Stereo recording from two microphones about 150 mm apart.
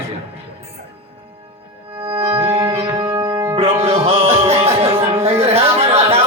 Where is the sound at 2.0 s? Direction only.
40° right (ahead or behind).